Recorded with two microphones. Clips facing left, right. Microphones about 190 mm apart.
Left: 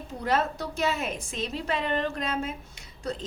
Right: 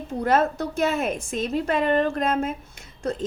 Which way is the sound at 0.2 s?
50° right (ahead or behind).